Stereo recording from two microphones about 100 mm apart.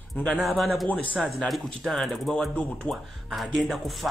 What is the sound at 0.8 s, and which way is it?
Speech, 15° left (ahead or behind).